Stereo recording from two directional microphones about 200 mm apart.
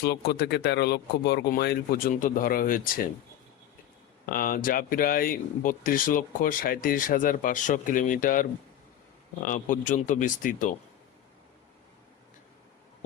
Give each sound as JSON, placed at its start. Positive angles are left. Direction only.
{"t": 0.0, "sound": "speech", "side_deg": 55}
{"t": 4.3, "sound": "speech", "side_deg": 45}